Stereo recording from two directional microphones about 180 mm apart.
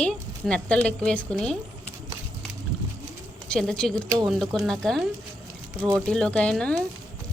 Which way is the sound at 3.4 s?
5° left (ahead or behind).